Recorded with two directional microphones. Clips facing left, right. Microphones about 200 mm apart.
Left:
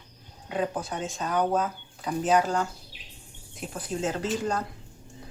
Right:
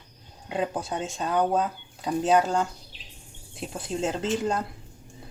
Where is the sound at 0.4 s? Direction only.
25° right (ahead or behind).